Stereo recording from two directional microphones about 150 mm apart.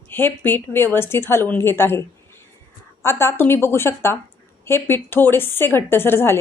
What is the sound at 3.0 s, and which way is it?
A woman's voice, 15° left (ahead or behind).